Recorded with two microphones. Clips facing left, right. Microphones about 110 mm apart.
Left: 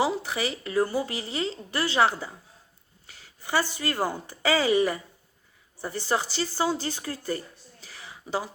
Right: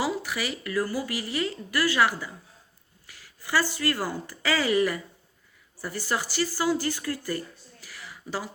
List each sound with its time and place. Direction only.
0.0 s speech: 25° left (ahead or behind)
3.4 s speech: 20° left (ahead or behind)
7.9 s a sound: 20° left (ahead or behind)